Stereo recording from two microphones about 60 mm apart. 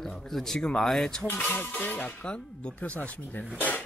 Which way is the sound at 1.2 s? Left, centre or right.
Left.